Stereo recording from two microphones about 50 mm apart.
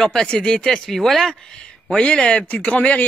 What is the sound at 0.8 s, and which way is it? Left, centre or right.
Speech, centre.